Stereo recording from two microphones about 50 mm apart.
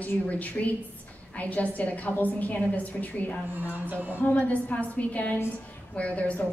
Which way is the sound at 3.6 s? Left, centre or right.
Right.